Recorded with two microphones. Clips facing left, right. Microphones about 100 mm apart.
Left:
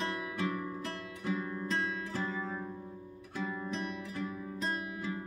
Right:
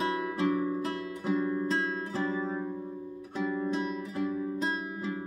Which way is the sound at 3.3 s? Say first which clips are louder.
Right 7 dB; 10° right (ahead or behind).